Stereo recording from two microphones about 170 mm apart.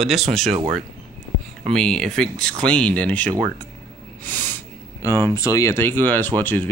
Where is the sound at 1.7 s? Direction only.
5° left (ahead or behind).